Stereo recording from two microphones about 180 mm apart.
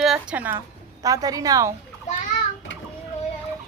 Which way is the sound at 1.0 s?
20° right (ahead or behind).